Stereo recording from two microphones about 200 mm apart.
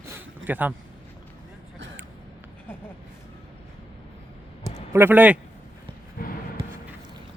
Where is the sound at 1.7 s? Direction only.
65° right (ahead or behind).